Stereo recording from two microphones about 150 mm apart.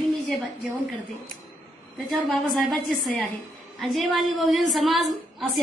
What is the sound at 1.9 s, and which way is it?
A woman's voice, centre (ahead or behind).